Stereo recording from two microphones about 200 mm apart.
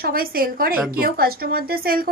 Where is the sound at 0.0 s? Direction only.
50° right (ahead or behind).